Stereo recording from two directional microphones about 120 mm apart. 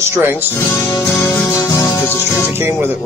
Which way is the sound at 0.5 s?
20° left (ahead or behind).